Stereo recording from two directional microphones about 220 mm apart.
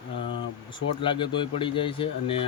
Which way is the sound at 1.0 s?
20° left (ahead or behind).